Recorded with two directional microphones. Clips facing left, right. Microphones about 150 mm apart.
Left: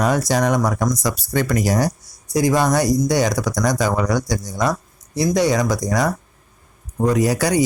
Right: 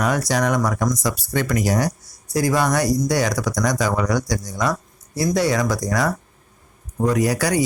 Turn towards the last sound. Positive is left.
turn(degrees=25)  # may be behind; listen again after turning